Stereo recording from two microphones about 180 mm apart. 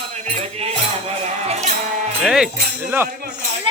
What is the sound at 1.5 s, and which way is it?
Music, 40° right (ahead or behind).